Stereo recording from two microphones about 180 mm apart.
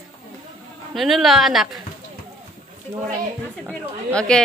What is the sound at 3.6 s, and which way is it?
Speech, 5° left (ahead or behind).